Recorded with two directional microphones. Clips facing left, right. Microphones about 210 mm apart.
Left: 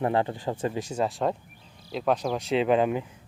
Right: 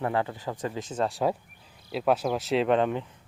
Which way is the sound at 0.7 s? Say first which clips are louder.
Left 1 dB; 10° left (ahead or behind).